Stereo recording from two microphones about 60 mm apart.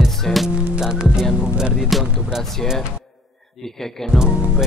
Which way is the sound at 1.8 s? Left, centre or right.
Centre.